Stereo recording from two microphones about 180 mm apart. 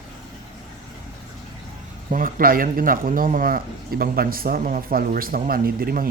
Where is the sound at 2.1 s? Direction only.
50° right (ahead or behind).